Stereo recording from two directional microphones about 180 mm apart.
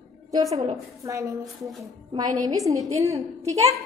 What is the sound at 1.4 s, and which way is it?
Speech, centre (ahead or behind).